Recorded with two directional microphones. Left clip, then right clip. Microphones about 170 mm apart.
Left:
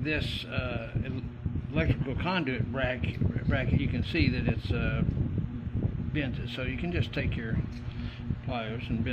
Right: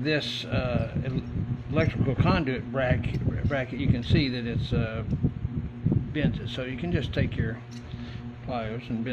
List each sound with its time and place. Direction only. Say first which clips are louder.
0.0 s a man's voice: right 4 dB; 15° right (ahead or behind)
6.1 s a man's voice: even; 15° right (ahead or behind)